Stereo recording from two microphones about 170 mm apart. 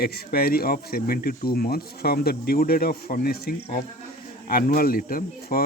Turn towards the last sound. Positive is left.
turn(degrees=60)  # may be behind; listen again after turning